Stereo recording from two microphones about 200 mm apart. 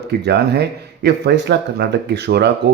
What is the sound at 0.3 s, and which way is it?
A man's voice, 55° right (ahead or behind).